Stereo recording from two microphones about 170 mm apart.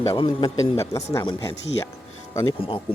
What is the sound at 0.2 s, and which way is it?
A man's voice, 20° left (ahead or behind).